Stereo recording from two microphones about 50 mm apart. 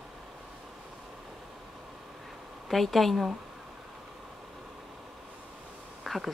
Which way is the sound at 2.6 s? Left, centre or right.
Centre.